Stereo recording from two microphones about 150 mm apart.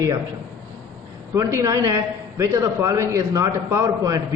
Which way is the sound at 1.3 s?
20° right (ahead or behind).